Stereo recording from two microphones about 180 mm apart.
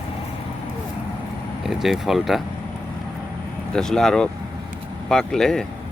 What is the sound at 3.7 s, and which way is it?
Speech, 5° left (ahead or behind).